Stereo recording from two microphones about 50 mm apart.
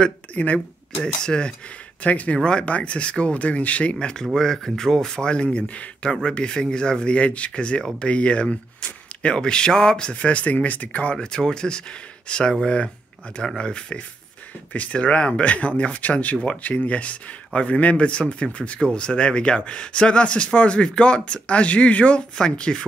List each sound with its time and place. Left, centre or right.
0.0 s speech: left
1.0 s speech: centre
2.0 s speech: left
2.3 s speech: centre
11.1 s speech: centre